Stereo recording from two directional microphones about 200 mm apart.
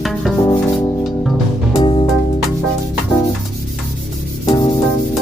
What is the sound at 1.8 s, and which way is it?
Music, 25° left (ahead or behind).